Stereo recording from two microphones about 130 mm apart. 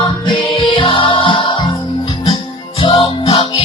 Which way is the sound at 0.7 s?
40° left (ahead or behind).